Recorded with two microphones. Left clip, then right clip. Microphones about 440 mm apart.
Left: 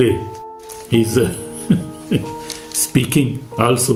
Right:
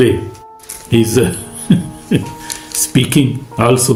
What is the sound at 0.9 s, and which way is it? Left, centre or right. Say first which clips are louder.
Speech: right 3 dB; left.